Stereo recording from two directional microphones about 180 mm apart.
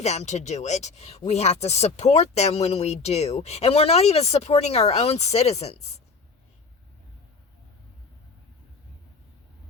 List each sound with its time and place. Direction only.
0.0 s speech: 40° left (ahead or behind)